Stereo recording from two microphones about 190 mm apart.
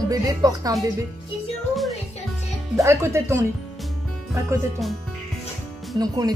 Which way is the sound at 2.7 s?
15° right (ahead or behind).